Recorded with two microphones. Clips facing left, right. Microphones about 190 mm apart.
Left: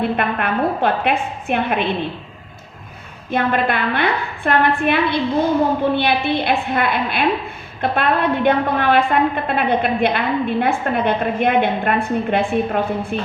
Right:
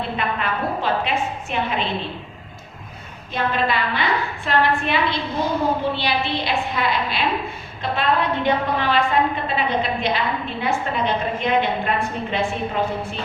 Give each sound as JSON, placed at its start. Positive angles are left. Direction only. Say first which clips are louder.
{"t": 0.2, "sound": "a woman's voice", "louder": "left 5 dB", "side_deg": 55}
{"t": 3.3, "sound": "a woman's voice", "louder": "left 4 dB", "side_deg": 55}